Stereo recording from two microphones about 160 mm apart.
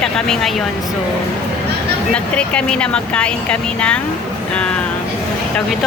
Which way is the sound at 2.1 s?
5° left (ahead or behind).